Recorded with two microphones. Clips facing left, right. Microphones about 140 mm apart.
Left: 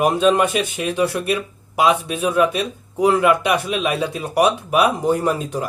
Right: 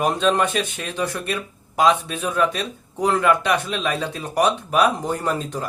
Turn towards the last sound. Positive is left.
turn(degrees=10)  # may be behind; listen again after turning